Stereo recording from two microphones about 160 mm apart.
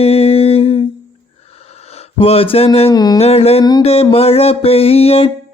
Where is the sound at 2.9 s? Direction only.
20° left (ahead or behind).